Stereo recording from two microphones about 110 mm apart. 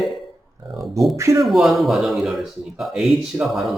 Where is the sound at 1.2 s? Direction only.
25° right (ahead or behind).